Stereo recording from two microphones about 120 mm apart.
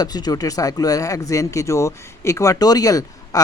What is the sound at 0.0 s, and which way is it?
Speech, 35° left (ahead or behind).